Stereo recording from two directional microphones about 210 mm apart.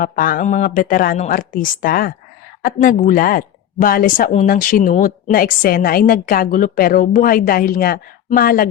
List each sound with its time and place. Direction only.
0.0 s a woman's voice: 40° left (ahead or behind)